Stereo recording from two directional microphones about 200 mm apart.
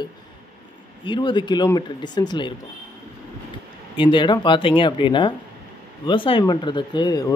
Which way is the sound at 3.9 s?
25° left (ahead or behind).